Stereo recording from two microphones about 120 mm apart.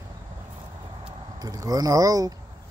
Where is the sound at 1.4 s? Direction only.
30° right (ahead or behind).